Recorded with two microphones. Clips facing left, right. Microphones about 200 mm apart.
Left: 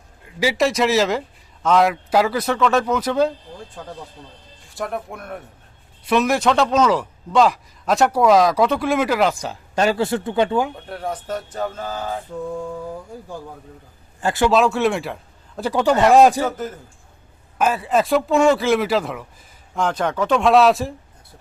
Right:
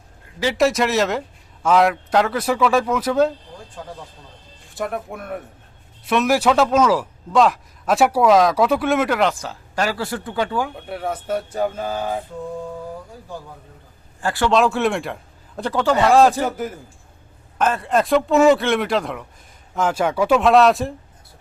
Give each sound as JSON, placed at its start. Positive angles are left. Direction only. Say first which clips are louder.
{"t": 0.5, "sound": "a man's voice", "louder": "right 1 dB", "side_deg": 0}
{"t": 4.7, "sound": "a man's voice", "louder": "right 1 dB", "side_deg": 0}
{"t": 9.4, "sound": "speech", "louder": "left 4 dB", "side_deg": 20}
{"t": 10.8, "sound": "speech", "louder": "right 2 dB", "side_deg": -10}
{"t": 14.2, "sound": "a man's voice", "louder": "left 2 dB", "side_deg": 20}
{"t": 14.5, "sound": "a man's voice", "louder": "right 2 dB", "side_deg": 0}
{"t": 15.7, "sound": "speech", "louder": "left 1 dB", "side_deg": 15}
{"t": 16.4, "sound": "speech", "louder": "even", "side_deg": -10}
{"t": 17.6, "sound": "a man's voice", "louder": "even", "side_deg": 5}